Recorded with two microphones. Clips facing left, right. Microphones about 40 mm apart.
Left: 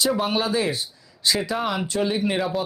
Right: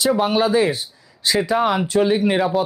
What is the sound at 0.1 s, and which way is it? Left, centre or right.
Speech, centre.